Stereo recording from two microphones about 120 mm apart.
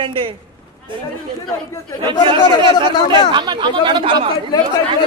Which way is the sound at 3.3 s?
40° right (ahead or behind).